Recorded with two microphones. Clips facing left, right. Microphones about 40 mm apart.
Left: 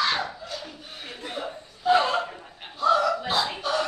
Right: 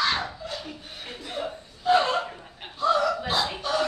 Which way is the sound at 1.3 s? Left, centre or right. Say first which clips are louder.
Right 4 dB; centre.